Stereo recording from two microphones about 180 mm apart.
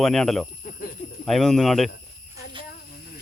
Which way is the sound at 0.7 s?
50° left (ahead or behind).